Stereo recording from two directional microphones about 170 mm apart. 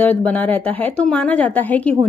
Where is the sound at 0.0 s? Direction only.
10° left (ahead or behind).